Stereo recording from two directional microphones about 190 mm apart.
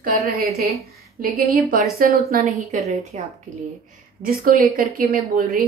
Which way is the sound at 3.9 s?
50° right (ahead or behind).